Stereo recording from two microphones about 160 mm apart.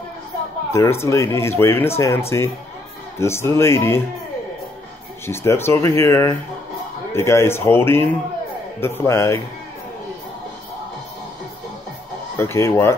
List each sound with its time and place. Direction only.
0.7 s speech: 15° left (ahead or behind)
5.2 s speech: 15° left (ahead or behind)
12.4 s speech: 15° left (ahead or behind)